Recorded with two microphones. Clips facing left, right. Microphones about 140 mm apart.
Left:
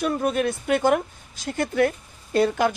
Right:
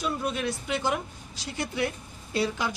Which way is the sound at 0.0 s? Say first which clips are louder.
Left 7 dB; 50° left (ahead or behind).